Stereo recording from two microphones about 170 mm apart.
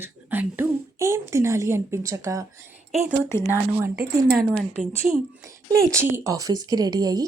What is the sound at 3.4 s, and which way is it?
Speech, 15° right (ahead or behind).